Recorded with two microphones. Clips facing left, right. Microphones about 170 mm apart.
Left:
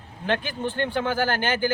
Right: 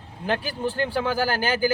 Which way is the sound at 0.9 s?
10° right (ahead or behind).